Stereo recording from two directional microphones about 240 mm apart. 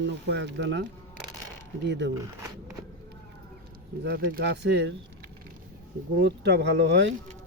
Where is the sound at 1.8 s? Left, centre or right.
Right.